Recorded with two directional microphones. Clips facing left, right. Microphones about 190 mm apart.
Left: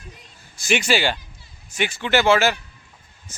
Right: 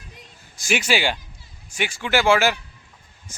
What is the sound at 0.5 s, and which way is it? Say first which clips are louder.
A man's voice: left 2 dB; 10° right (ahead or behind).